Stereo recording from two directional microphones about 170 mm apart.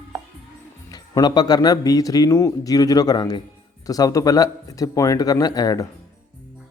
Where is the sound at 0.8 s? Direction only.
25° left (ahead or behind).